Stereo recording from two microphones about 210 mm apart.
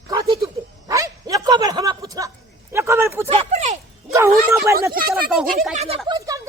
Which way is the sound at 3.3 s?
30° right (ahead or behind).